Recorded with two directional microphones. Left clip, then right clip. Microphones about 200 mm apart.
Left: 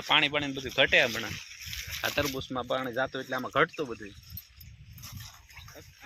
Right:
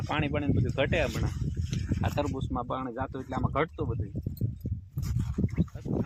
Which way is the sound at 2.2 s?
60° right (ahead or behind).